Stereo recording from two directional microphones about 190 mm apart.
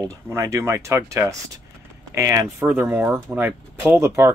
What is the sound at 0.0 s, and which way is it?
Speech, 15° right (ahead or behind).